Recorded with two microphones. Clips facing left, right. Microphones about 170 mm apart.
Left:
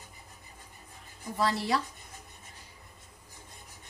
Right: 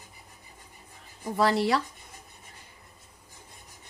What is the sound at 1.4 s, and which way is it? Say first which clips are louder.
Speech: right 5 dB; 70° right (ahead or behind).